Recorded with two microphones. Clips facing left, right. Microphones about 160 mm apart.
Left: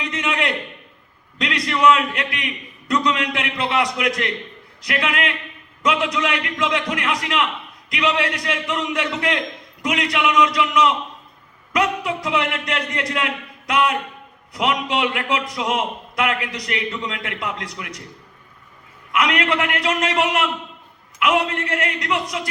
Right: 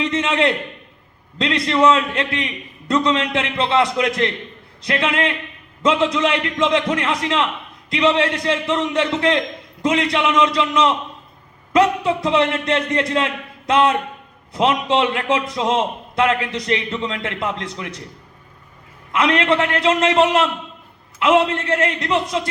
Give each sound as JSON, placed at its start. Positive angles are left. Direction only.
{"t": 0.0, "sound": "a man's voice", "side_deg": -25}
{"t": 19.1, "sound": "a man's voice", "side_deg": -25}